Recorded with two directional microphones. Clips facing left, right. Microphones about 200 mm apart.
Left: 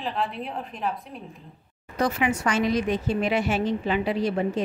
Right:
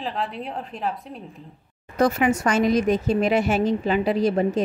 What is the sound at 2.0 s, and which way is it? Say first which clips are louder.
A woman's voice: right 5 dB; 45° right (ahead or behind).